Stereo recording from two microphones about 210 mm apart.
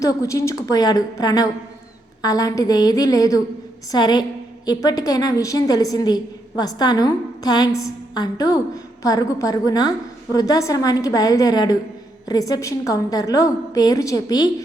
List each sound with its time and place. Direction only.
0.0 s a woman's voice: 15° left (ahead or behind)